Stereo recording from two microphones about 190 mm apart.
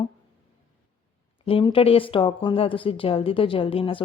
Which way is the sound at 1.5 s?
30° left (ahead or behind).